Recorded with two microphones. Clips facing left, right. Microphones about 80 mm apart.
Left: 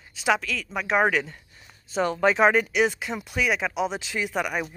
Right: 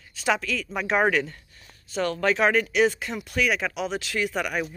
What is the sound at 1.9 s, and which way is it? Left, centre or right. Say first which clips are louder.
Speech: left 2 dB; centre.